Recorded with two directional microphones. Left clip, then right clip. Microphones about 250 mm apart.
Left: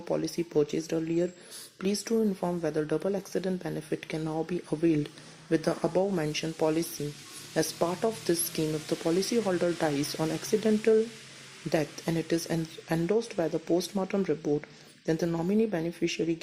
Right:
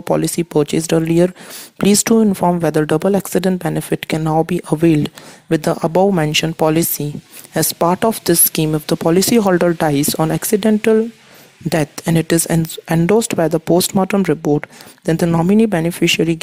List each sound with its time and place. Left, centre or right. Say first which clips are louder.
0.0 s speech: right 14 dB; right
12.0 s speech: right 13 dB; right